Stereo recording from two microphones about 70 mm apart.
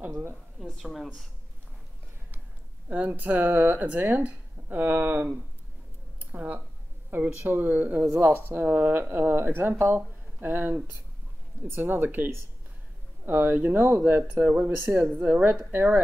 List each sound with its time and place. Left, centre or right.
0.7 s speech: centre
2.9 s speech: right
6.1 s a sound: right
7.1 s speech: right